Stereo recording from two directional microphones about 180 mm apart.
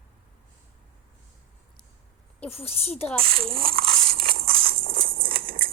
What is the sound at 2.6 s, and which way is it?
Speech, 35° left (ahead or behind).